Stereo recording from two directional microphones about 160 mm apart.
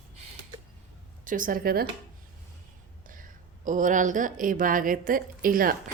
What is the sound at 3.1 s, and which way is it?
Speech, 55° right (ahead or behind).